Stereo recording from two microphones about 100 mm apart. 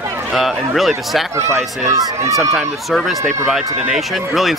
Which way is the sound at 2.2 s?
30° right (ahead or behind).